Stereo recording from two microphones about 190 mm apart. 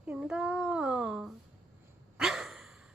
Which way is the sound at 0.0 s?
5° right (ahead or behind).